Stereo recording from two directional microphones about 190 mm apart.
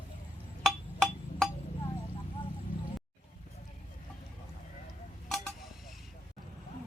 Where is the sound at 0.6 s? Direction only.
5° left (ahead or behind).